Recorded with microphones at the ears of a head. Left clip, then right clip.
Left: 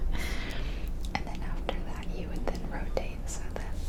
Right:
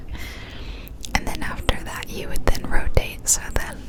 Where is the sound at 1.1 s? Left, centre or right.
Right.